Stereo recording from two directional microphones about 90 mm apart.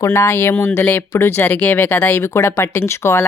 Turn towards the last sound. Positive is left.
turn(degrees=30)  # may be behind; listen again after turning